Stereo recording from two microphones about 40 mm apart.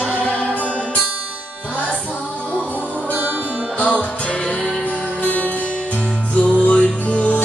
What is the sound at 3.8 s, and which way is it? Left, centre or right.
Music, left.